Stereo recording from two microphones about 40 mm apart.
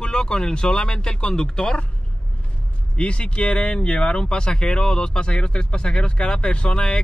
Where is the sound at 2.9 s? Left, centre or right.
Left.